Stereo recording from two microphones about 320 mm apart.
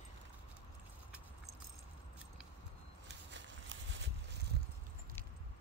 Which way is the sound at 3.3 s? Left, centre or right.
Right.